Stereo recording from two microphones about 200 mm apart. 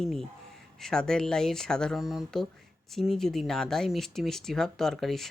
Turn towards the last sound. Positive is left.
turn(degrees=0)  # may be behind; listen again after turning